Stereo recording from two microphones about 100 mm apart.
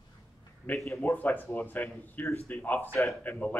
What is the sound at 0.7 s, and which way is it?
A man's voice, 20° left (ahead or behind).